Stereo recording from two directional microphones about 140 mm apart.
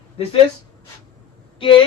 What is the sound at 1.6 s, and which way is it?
Speech, 40° left (ahead or behind).